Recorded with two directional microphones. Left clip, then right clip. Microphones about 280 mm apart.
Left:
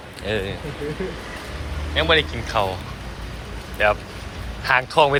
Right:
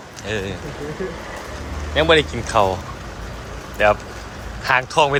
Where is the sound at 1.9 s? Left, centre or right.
Centre.